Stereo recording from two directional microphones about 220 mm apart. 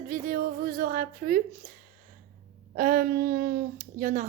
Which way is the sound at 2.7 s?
40° right (ahead or behind).